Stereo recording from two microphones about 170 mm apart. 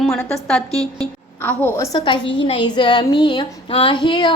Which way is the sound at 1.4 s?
10° left (ahead or behind).